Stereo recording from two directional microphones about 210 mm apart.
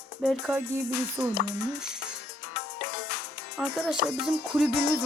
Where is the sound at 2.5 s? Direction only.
50° left (ahead or behind).